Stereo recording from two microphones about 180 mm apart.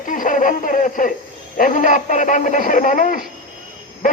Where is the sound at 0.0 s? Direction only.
45° left (ahead or behind).